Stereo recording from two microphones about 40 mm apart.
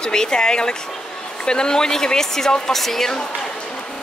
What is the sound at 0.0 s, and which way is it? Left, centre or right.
A woman's voice, centre.